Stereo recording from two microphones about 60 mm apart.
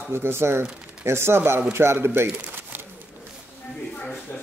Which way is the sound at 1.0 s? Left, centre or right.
Right.